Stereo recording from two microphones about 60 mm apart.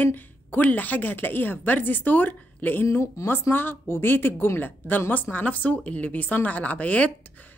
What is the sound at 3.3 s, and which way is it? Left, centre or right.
A woman's voice, left.